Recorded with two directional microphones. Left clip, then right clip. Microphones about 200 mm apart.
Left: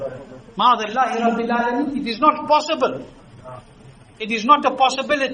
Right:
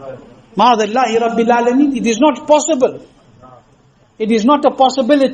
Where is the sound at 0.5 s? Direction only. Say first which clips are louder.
Right 5 dB; 40° right (ahead or behind).